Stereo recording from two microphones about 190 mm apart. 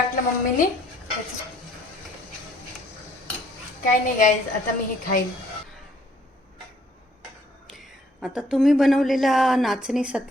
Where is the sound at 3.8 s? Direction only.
45° left (ahead or behind).